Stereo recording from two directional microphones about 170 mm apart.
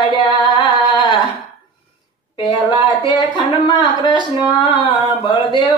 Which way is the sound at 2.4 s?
25° left (ahead or behind).